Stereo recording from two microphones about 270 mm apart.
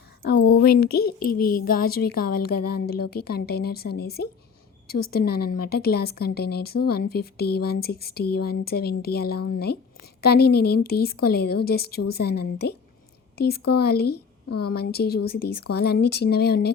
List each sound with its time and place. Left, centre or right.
0.3 s speech: left